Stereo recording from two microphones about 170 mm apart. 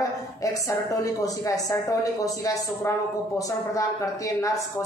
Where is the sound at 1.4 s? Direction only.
20° left (ahead or behind).